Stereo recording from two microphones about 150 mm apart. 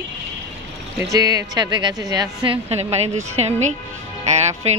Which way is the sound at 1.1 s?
25° right (ahead or behind).